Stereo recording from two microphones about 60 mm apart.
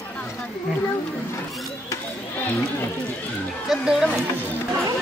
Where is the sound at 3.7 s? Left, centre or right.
Centre.